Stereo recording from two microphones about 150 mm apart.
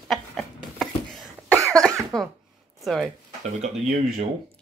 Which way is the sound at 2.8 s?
Centre (ahead or behind).